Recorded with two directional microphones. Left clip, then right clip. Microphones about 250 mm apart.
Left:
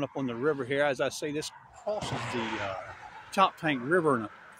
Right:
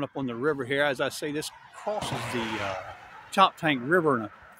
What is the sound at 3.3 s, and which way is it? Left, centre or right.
Speech, centre.